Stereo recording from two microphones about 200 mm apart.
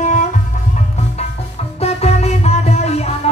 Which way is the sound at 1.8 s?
30° left (ahead or behind).